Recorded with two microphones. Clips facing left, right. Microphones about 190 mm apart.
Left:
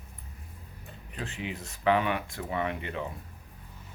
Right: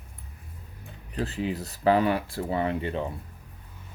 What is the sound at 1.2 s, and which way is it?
Speech, 35° right (ahead or behind).